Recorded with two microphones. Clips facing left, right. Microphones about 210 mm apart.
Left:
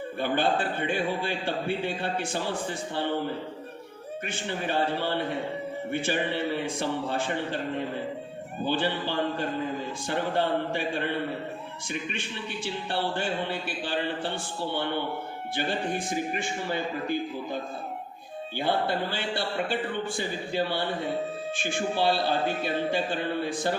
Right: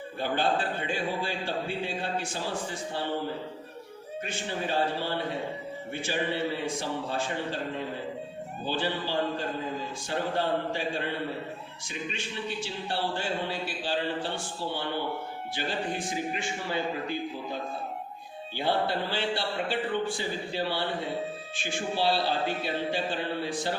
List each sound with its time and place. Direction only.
0.2 s a man's voice: 60° left (ahead or behind)
5.9 s a man's voice: 55° left (ahead or behind)
8.6 s a man's voice: 55° left (ahead or behind)
12.6 s a man's voice: 55° left (ahead or behind)
15.5 s a man's voice: 55° left (ahead or behind)
18.6 s a man's voice: 50° left (ahead or behind)